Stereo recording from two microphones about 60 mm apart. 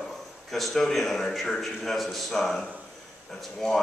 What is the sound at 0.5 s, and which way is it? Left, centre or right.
Speech, centre.